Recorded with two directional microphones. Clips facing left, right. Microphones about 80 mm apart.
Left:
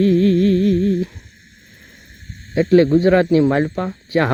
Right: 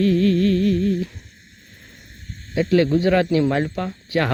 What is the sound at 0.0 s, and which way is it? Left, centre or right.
Humming, left.